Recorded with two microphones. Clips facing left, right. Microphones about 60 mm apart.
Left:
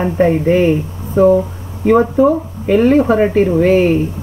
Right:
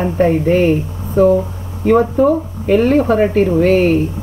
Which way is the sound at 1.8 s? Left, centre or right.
Centre.